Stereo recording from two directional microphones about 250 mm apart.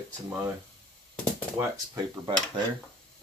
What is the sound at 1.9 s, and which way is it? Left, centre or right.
Speech, centre.